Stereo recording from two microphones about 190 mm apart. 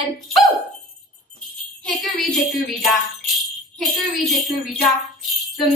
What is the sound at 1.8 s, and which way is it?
Music, centre (ahead or behind).